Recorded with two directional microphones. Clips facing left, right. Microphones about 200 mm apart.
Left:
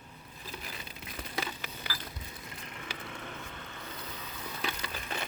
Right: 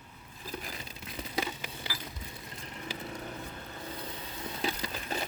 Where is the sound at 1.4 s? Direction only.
20° right (ahead or behind).